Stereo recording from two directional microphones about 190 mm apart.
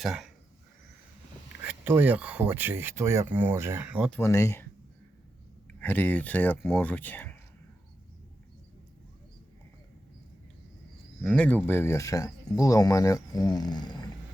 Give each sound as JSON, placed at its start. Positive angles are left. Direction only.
{"t": 0.0, "sound": "speech", "side_deg": 0}
{"t": 1.6, "sound": "speech", "side_deg": -10}
{"t": 4.1, "sound": "speech", "side_deg": 15}
{"t": 5.8, "sound": "speech", "side_deg": 10}
{"t": 11.2, "sound": "speech", "side_deg": 5}